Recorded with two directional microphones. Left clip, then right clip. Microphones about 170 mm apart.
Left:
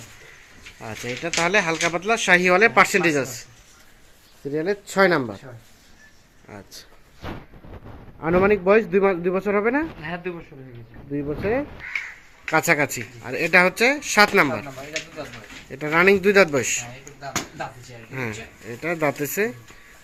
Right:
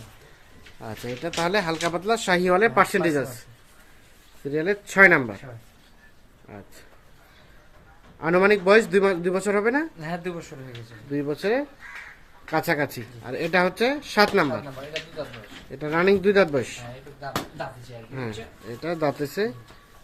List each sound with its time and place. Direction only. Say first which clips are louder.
0.8 s speech: left 3 dB; 5° left (ahead or behind)
4.5 s speech: right 1 dB; centre (ahead or behind)
8.2 s speech: even; centre (ahead or behind)
10.0 s speech: left 1 dB; 90° right
11.1 s speech: even; centre (ahead or behind)
12.5 s speech: left 5 dB; 25° left (ahead or behind)
13.2 s speech: left 5 dB; 10° left (ahead or behind)
15.7 s speech: left 4 dB; 10° left (ahead or behind)
18.1 s speech: left 4 dB; 15° left (ahead or behind)